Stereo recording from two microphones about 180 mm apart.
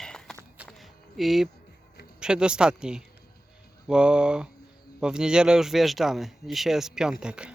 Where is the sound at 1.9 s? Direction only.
60° left (ahead or behind).